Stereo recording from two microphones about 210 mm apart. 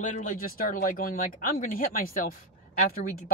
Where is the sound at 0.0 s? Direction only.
35° left (ahead or behind).